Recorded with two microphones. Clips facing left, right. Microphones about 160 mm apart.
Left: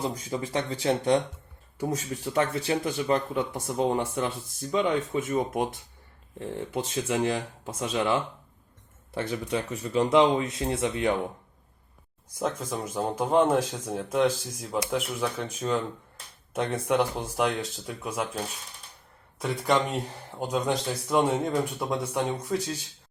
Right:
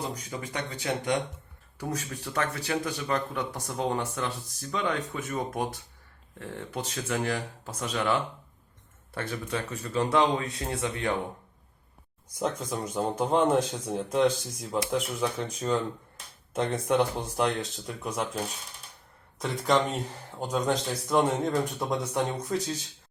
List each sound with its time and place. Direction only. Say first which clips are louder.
0.1 s speech: left 5 dB; 25° left (ahead or behind)
12.4 s speech: even; centre (ahead or behind)